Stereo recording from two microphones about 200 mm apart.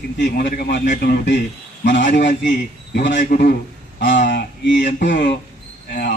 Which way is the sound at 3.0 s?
60° left (ahead or behind).